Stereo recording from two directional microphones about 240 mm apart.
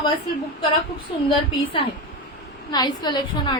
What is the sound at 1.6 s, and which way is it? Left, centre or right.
A woman's voice, left.